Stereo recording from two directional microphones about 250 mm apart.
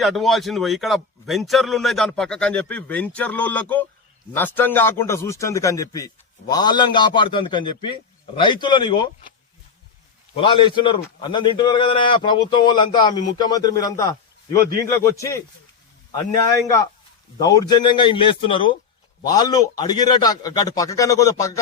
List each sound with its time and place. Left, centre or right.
0.0 s a man's voice: centre
10.3 s a man's voice: centre
16.6 s a man's voice: centre